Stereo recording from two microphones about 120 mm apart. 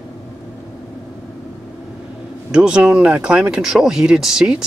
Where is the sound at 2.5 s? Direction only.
5° right (ahead or behind).